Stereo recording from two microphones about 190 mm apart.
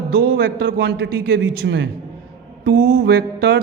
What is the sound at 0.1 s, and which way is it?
Speech, 50° right (ahead or behind).